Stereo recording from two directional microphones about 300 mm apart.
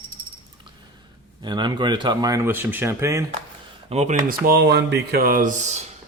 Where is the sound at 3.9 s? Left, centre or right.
Right.